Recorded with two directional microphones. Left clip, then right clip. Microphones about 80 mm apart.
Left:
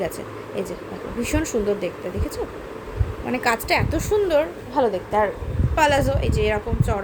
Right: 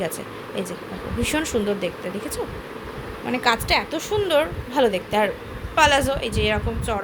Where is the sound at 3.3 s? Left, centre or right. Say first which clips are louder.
Right 1 dB; left.